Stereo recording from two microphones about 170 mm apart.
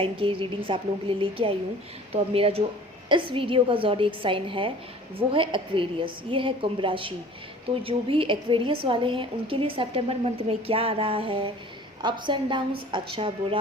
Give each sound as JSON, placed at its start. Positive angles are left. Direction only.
{"t": 0.0, "sound": "a woman's voice", "side_deg": -30}